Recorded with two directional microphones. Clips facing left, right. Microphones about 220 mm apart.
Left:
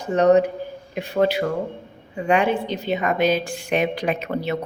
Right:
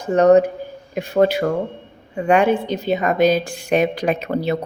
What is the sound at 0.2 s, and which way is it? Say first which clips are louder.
A woman's voice: right 3 dB; 45° right (ahead or behind).